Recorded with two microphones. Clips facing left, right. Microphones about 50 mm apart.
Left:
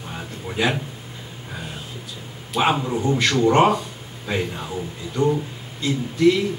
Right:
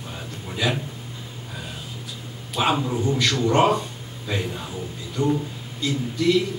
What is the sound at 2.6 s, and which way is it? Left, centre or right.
Speech, left.